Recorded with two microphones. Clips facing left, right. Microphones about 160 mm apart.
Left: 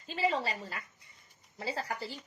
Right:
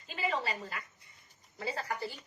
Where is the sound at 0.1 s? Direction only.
30° left (ahead or behind).